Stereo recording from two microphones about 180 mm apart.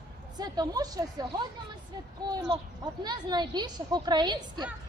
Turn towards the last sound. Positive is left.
turn(degrees=-25)  # may be behind; listen again after turning